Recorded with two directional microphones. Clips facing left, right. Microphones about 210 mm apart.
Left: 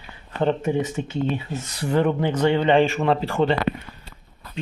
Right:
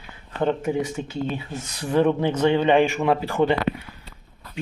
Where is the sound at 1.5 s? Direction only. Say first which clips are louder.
Left 3 dB; centre (ahead or behind).